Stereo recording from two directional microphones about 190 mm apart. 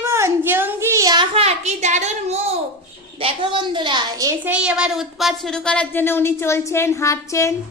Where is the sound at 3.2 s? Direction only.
30° right (ahead or behind); by 7.5 s 15° left (ahead or behind).